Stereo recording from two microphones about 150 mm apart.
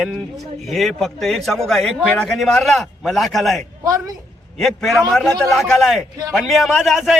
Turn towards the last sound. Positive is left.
turn(degrees=0)  # may be behind; listen again after turning